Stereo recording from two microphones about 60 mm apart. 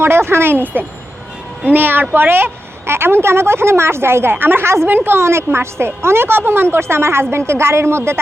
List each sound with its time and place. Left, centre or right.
0.0 s a woman's voice: right